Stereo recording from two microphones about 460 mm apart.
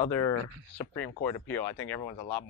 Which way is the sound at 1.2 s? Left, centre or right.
Left.